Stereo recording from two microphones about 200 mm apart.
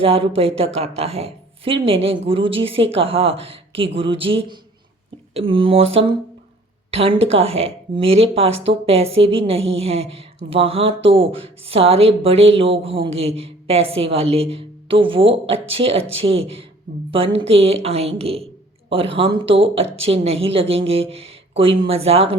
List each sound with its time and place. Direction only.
0.0 s a woman's voice: 30° right (ahead or behind)